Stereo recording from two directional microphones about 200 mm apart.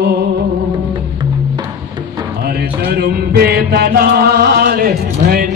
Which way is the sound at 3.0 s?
55° right (ahead or behind).